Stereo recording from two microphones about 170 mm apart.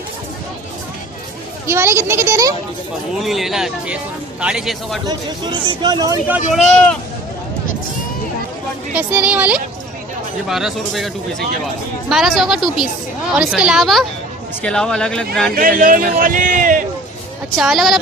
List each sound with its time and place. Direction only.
1.6 s speech: 15° right (ahead or behind)
3.2 s speech: centre (ahead or behind)
5.0 s speech: 30° right (ahead or behind)
6.2 s speech: 10° right (ahead or behind)
6.6 s speech: 5° left (ahead or behind)
8.9 s speech: 10° right (ahead or behind)
15.5 s a man's voice: 55° right (ahead or behind)
17.6 s speech: centre (ahead or behind)